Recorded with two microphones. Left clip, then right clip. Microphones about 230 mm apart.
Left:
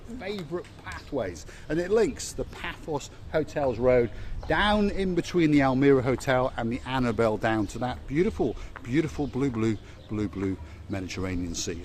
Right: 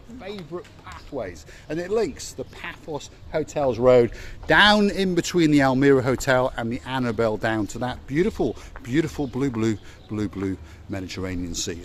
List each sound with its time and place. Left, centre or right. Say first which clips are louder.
0.5 s speech: left 1 dB; centre
3.5 s speech: right 7 dB; right
4.5 s speech: right 8 dB; right